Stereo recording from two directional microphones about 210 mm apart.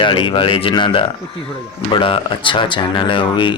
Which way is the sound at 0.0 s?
25° left (ahead or behind).